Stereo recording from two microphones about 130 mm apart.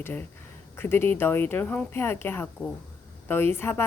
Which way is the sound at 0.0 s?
15° left (ahead or behind).